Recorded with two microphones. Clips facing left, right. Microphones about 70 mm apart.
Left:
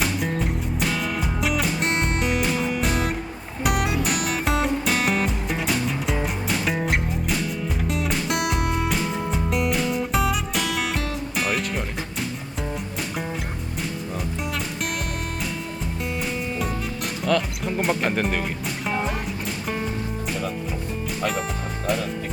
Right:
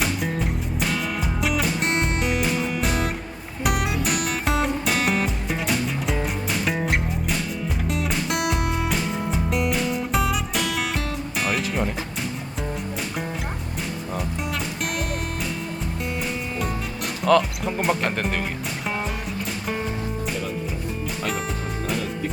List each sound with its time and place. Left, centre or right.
0.0 s music: centre
17.2 s music: centre